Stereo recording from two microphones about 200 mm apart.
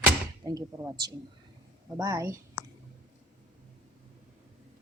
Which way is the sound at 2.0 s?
15° right (ahead or behind).